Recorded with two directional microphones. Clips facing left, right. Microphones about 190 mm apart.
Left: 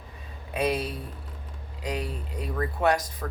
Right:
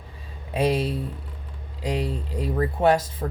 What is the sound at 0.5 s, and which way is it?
Speech, 30° right (ahead or behind).